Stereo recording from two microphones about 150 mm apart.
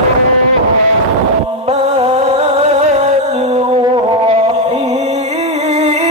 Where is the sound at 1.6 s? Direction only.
45° right (ahead or behind).